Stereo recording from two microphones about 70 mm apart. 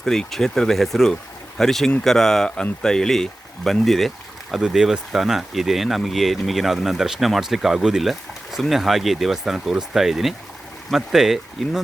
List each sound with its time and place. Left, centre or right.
0.0 s speech: centre